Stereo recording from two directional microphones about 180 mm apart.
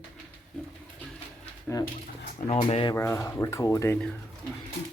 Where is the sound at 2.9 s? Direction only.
15° left (ahead or behind).